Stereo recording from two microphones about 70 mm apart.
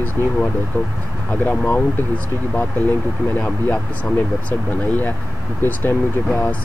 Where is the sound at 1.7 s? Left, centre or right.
Centre.